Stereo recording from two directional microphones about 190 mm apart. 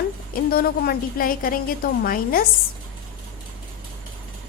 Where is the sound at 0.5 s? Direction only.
50° left (ahead or behind).